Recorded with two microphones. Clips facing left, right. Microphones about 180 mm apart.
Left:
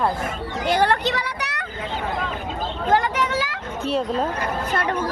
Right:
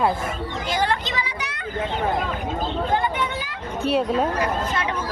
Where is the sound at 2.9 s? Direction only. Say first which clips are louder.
Left 7 dB; 90° left.